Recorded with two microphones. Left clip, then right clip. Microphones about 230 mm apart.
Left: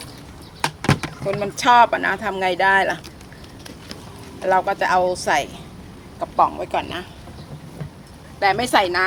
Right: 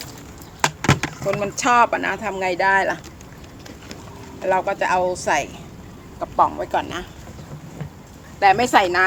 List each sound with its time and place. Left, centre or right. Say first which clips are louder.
0.6 s vehicle: right 2 dB; right
1.4 s speech: left 3 dB; centre
4.4 s speech: left 1 dB; centre
8.4 s speech: right 2 dB; centre